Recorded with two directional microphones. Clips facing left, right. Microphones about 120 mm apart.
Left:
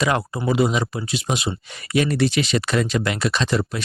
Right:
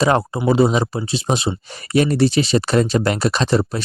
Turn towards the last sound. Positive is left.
turn(degrees=-35)  # may be behind; listen again after turning